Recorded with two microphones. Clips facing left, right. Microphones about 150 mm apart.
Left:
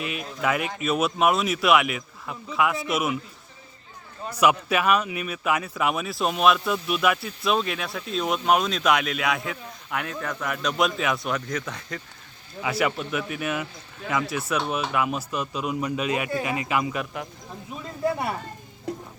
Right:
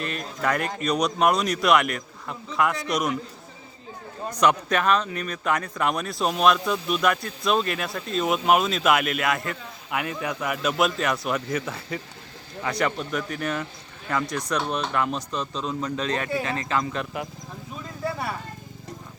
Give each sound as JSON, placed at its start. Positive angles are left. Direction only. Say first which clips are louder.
{"t": 0.0, "sound": "speech", "louder": "even", "side_deg": 5}
{"t": 4.3, "sound": "speech", "louder": "even", "side_deg": 10}
{"t": 12.6, "sound": "speech", "louder": "left 1 dB", "side_deg": 5}
{"t": 18.0, "sound": "speech", "louder": "left 4 dB", "side_deg": 20}